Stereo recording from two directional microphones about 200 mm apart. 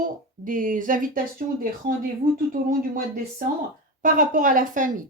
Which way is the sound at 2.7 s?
45° right (ahead or behind).